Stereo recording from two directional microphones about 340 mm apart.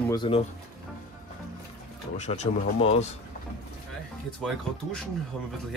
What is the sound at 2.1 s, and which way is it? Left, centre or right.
Speech, centre.